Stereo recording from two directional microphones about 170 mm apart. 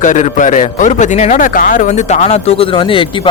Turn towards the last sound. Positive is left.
turn(degrees=35)  # may be behind; listen again after turning